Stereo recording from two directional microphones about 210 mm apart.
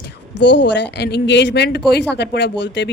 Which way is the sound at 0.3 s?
55° left (ahead or behind).